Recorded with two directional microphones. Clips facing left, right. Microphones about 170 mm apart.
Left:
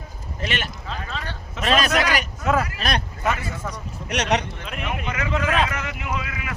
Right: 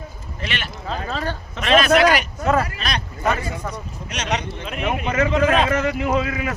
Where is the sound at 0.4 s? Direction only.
45° left (ahead or behind).